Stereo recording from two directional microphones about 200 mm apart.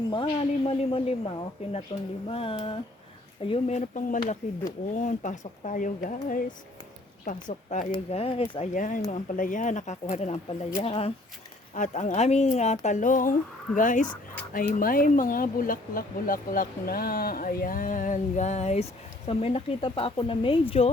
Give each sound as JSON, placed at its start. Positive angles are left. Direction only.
{"t": 0.1, "sound": "speech", "side_deg": 25}
{"t": 7.4, "sound": "speech", "side_deg": 35}